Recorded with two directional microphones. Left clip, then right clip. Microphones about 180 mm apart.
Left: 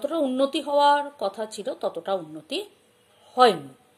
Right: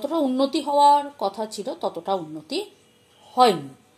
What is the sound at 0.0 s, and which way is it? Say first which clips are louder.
A woman's voice: right 1 dB; 10° left (ahead or behind).